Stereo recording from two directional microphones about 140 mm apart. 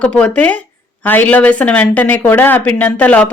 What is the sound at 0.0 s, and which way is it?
Speech, 10° left (ahead or behind).